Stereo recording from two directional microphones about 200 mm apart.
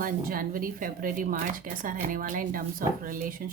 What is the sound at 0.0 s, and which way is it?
Speech, 45° right (ahead or behind).